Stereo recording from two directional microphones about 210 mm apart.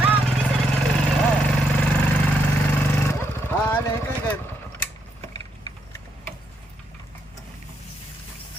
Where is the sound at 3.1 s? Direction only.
10° left (ahead or behind).